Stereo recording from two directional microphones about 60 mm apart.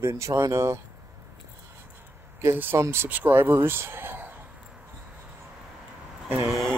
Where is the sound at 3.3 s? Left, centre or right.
Right.